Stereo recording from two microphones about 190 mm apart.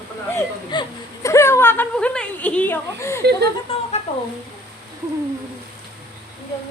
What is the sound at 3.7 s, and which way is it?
Speech, 30° left (ahead or behind).